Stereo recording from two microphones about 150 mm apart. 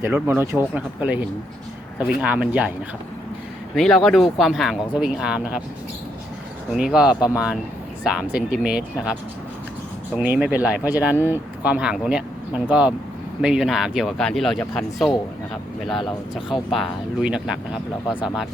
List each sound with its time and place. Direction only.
0.0 s speech: 15° right (ahead or behind)
2.0 s speech: 10° right (ahead or behind)
3.8 s speech: centre (ahead or behind)
6.7 s speech: 5° right (ahead or behind)
10.2 s speech: 10° right (ahead or behind)